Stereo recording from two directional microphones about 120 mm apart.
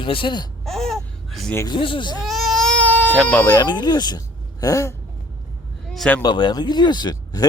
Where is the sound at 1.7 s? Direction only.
45° left (ahead or behind).